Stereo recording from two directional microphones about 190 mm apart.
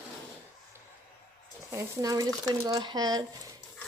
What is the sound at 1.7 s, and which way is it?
Speech, 20° right (ahead or behind).